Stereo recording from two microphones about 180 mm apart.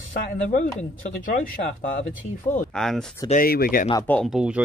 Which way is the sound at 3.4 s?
55° left (ahead or behind).